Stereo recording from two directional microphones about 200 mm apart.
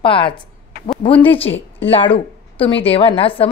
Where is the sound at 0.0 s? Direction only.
25° left (ahead or behind).